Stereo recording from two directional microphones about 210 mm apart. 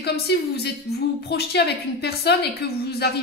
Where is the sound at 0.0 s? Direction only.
50° left (ahead or behind).